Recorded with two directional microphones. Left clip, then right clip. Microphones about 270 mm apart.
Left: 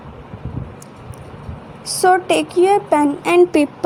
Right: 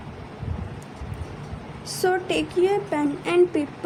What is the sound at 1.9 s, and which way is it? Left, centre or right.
Speech, centre.